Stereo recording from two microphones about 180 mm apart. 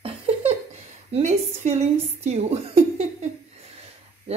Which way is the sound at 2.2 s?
35° right (ahead or behind).